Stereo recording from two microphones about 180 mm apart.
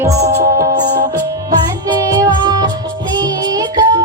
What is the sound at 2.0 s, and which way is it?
Music, 20° right (ahead or behind).